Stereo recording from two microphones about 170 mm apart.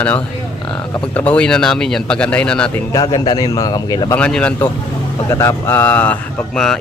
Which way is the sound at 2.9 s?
20° left (ahead or behind).